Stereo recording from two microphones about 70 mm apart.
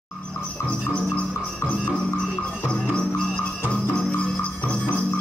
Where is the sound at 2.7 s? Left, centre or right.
Centre.